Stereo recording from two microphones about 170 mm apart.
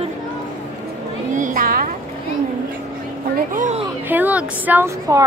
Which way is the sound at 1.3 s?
50° right (ahead or behind).